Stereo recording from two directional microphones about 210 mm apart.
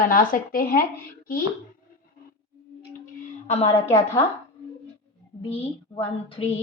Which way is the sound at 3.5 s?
30° left (ahead or behind).